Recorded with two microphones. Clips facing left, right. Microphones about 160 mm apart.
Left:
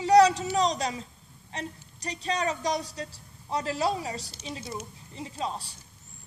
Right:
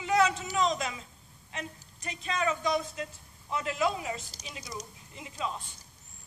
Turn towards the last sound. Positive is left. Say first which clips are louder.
# left 3 dB
turn(degrees=35)  # may be behind; listen again after turning